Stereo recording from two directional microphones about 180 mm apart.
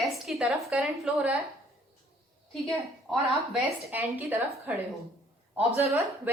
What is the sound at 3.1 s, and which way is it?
A woman's voice, 5° right (ahead or behind).